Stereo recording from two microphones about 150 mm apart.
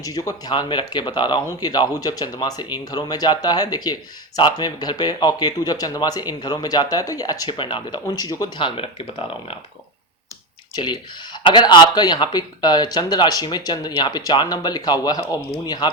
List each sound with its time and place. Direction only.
0.0 s speech: 25° left (ahead or behind)
10.8 s speech: 30° left (ahead or behind)